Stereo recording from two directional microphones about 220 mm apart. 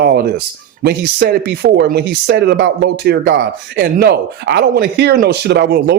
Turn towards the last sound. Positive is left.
turn(degrees=-45)  # may be behind; listen again after turning